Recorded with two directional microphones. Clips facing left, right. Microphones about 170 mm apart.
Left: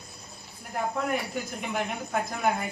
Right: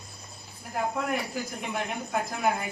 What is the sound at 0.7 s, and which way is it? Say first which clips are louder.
Speech: even; centre (ahead or behind).